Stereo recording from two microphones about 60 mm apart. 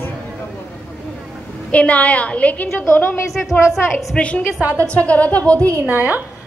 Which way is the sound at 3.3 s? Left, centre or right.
Centre.